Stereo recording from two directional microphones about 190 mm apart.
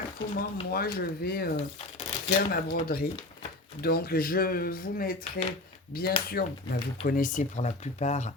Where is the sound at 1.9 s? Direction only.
50° left (ahead or behind).